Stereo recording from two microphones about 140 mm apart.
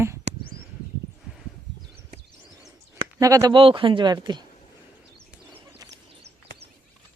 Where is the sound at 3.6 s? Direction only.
40° right (ahead or behind).